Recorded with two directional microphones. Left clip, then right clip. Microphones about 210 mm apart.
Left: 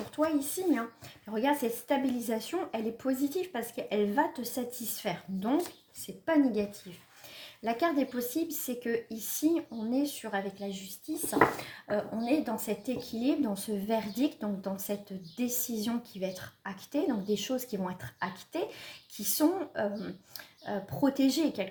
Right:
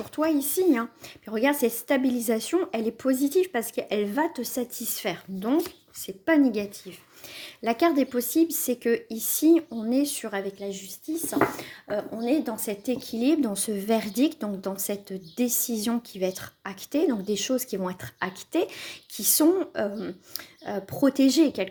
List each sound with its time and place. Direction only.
0.2 s a woman's voice: 35° right (ahead or behind)